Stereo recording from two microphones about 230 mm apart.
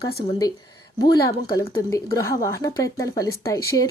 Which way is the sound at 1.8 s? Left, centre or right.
Centre.